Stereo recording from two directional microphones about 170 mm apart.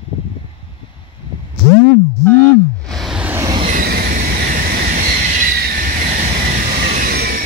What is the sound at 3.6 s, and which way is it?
Vehicle, 60° right (ahead or behind).